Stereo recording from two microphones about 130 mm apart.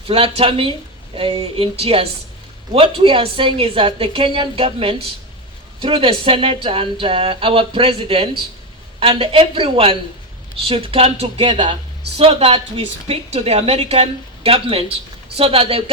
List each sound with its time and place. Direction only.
0.1 s speech: 50° right (ahead or behind)
11.4 s speech: 35° right (ahead or behind)
12.1 s speech: 50° right (ahead or behind)